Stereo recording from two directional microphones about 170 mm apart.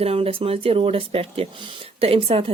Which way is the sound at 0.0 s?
35° right (ahead or behind).